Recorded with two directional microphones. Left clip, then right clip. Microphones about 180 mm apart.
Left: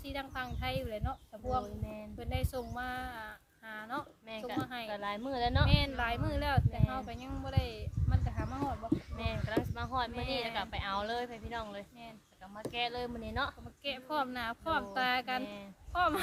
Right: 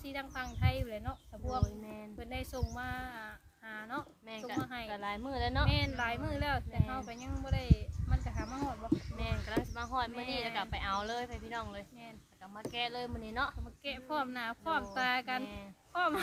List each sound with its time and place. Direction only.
0.0 s speech: 15° left (ahead or behind)
4.3 s a woman's voice: centre (ahead or behind)
4.6 s speech: 15° left (ahead or behind)
4.9 s a woman's voice: centre (ahead or behind)
5.6 s speech: 15° left (ahead or behind)
9.1 s a woman's voice: centre (ahead or behind)
13.8 s speech: 15° left (ahead or behind)